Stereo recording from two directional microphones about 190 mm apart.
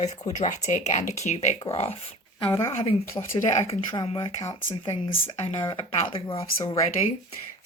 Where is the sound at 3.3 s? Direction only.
30° left (ahead or behind).